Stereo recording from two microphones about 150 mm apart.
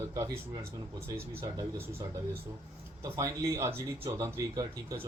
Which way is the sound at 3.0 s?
20° right (ahead or behind).